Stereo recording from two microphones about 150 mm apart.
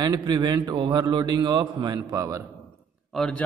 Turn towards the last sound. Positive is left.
turn(degrees=5)  # may be behind; listen again after turning